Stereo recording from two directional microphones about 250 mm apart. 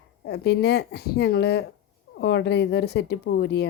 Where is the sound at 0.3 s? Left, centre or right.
Left.